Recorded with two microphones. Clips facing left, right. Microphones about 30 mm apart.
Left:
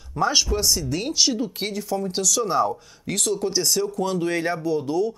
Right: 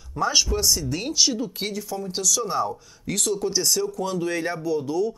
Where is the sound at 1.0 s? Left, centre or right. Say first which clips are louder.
Even; left.